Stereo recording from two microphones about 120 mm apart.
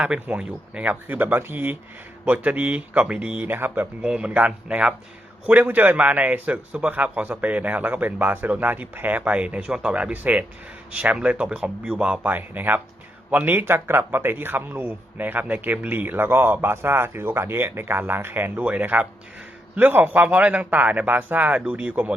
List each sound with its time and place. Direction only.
0.0 s a man's voice: 10° right (ahead or behind)